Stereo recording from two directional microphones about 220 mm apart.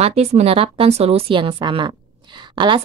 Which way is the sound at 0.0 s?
30° right (ahead or behind).